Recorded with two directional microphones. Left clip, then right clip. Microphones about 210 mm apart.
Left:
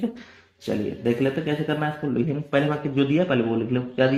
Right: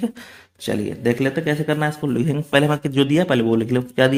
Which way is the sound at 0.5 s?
40° right (ahead or behind).